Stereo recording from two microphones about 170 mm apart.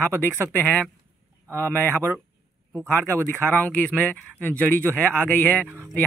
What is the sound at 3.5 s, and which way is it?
Speech, 10° left (ahead or behind).